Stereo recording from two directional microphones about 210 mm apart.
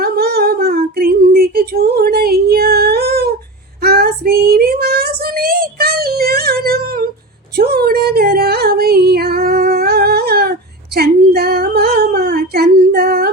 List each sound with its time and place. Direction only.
0.0 s a sound: 45° right (ahead or behind)
3.8 s child singing: 45° right (ahead or behind)
7.5 s female singing: 45° right (ahead or behind)